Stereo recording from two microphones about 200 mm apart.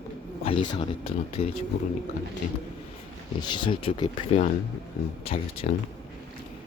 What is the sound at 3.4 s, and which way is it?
Speech, 25° left (ahead or behind).